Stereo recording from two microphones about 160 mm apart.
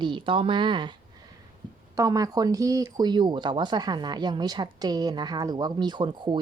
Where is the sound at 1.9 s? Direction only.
20° right (ahead or behind).